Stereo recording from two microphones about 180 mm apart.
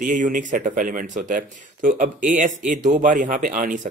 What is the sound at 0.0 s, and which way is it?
Speech, 45° right (ahead or behind).